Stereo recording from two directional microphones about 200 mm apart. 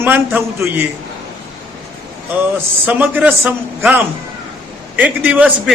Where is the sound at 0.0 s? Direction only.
10° right (ahead or behind).